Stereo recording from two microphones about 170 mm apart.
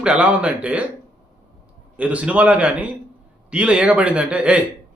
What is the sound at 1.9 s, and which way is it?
A man's voice, 10° right (ahead or behind).